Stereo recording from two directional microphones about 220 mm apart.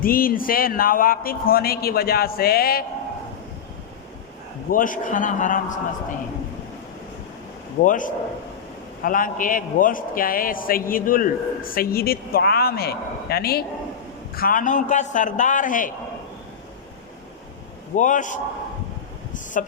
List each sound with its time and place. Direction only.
0.0 s a man's voice: 40° left (ahead or behind)
4.7 s a man's voice: 35° left (ahead or behind)
7.8 s a man's voice: 35° left (ahead or behind)
17.9 s a man's voice: 35° left (ahead or behind)